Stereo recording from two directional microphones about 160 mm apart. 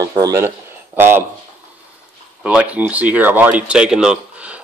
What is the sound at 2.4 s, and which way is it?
Speech, 10° right (ahead or behind).